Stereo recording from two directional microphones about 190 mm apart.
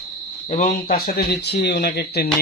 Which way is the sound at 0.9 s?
55° left (ahead or behind).